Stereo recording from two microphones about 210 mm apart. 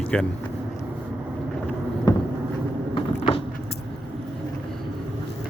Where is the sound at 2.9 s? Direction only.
25° left (ahead or behind).